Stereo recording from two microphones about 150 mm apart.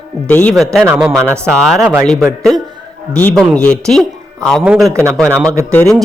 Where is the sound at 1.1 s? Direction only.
15° right (ahead or behind).